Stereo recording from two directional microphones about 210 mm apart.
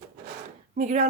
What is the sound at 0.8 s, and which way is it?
Speech, 35° right (ahead or behind).